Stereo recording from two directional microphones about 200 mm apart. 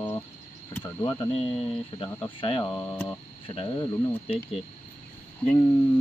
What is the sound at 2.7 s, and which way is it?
Speech, 10° left (ahead or behind).